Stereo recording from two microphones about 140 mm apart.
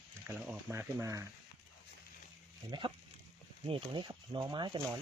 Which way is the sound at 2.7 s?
35° right (ahead or behind).